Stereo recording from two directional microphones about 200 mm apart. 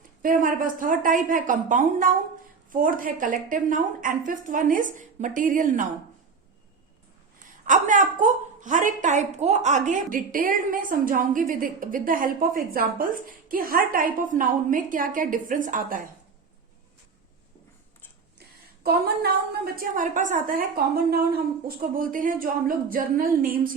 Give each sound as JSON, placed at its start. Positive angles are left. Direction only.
{"t": 0.2, "sound": "a woman's voice", "side_deg": -40}
{"t": 7.6, "sound": "a woman's voice", "side_deg": -40}
{"t": 18.3, "sound": "a woman's voice", "side_deg": -50}